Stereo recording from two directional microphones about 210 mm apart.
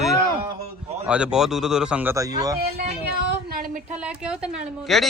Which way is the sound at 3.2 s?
45° right (ahead or behind).